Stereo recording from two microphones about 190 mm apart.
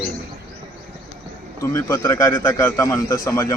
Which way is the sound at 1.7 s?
15° left (ahead or behind).